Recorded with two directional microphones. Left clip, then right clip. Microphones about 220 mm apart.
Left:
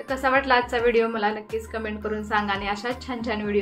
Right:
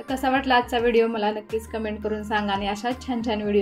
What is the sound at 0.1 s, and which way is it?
A woman's voice, 35° right (ahead or behind).